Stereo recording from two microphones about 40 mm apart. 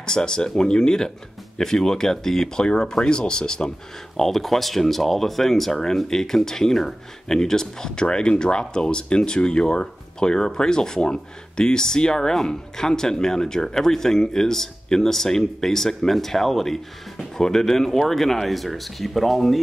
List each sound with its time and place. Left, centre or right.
0.0 s speech: centre
4.2 s speech: centre